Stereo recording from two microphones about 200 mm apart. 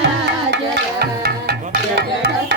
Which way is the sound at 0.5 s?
55° right (ahead or behind).